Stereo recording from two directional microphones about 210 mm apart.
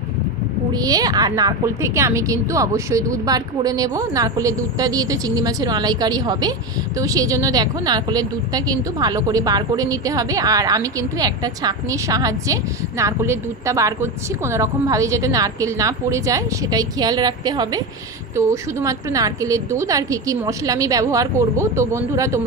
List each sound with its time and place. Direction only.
0.7 s a woman's voice: 15° right (ahead or behind)